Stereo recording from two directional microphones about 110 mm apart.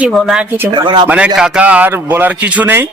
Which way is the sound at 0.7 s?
45° right (ahead or behind).